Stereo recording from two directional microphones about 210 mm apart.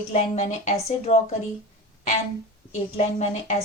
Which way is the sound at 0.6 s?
30° left (ahead or behind).